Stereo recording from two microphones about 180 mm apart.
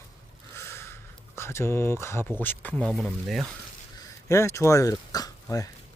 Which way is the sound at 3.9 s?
15° left (ahead or behind).